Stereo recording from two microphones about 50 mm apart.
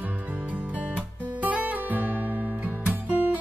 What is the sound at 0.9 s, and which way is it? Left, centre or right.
Music, right.